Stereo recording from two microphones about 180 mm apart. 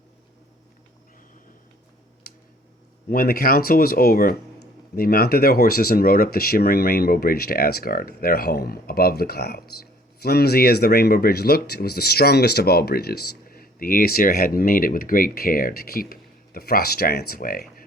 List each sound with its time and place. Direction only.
3.1 s speech: 55° left (ahead or behind)